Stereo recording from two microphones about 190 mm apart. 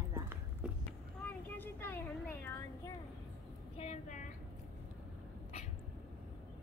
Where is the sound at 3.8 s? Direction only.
40° left (ahead or behind).